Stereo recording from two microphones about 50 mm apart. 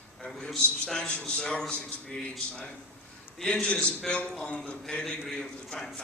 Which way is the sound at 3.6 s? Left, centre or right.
Left.